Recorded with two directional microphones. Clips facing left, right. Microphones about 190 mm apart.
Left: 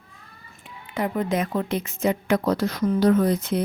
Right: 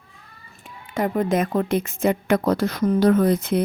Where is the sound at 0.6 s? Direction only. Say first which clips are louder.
Right 3 dB; 45° right (ahead or behind).